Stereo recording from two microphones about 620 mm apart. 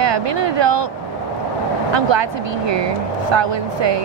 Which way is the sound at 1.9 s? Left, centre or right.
Right.